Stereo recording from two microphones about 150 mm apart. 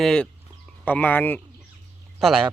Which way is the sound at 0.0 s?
5° left (ahead or behind).